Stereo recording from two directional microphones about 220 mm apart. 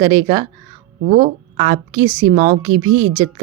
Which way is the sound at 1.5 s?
25° right (ahead or behind).